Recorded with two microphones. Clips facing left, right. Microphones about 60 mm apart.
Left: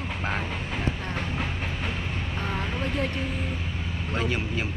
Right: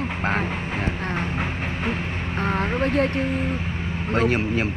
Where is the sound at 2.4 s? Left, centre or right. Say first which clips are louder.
Right 9 dB; right.